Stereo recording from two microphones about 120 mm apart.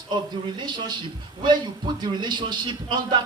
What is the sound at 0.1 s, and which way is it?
A man's voice, 35° right (ahead or behind).